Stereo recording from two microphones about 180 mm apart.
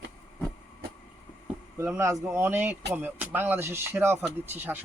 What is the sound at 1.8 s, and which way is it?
Speech, 15° right (ahead or behind).